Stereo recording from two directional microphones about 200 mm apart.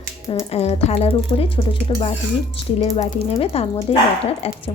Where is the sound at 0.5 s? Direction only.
30° left (ahead or behind).